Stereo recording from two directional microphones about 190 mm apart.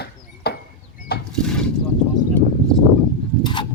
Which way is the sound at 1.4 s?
5° left (ahead or behind).